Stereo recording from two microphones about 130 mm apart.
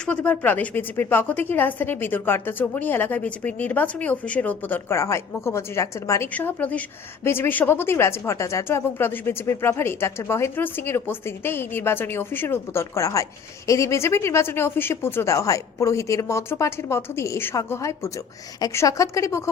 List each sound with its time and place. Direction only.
0.0 s a woman's voice: 10° left (ahead or behind)
6.3 s a woman's voice: 10° left (ahead or behind)